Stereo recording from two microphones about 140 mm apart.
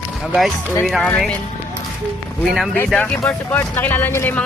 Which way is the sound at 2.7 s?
10° left (ahead or behind).